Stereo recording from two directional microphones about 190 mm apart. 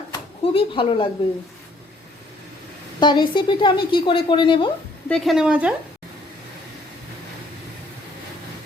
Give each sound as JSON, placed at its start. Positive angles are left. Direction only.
{"t": 0.1, "sound": "speech", "side_deg": 25}
{"t": 3.0, "sound": "a woman's voice", "side_deg": 25}
{"t": 5.0, "sound": "a woman's voice", "side_deg": 0}